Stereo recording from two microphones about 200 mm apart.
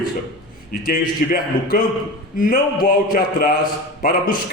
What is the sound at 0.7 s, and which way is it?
A man's voice, 45° left (ahead or behind).